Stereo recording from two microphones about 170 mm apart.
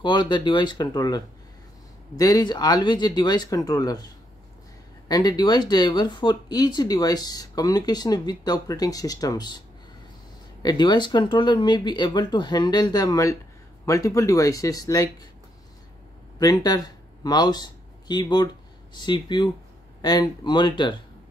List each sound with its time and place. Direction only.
0.0 s speech: 25° left (ahead or behind)
10.6 s speech: 25° left (ahead or behind)
16.3 s speech: 20° left (ahead or behind)